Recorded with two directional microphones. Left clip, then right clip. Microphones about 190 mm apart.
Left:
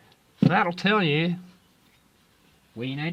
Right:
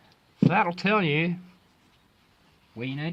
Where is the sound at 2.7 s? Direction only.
Centre (ahead or behind).